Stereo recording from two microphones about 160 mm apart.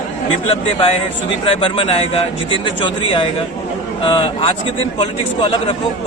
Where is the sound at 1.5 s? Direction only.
35° left (ahead or behind).